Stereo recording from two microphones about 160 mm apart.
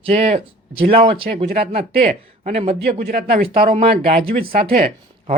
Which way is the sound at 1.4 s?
70° right (ahead or behind).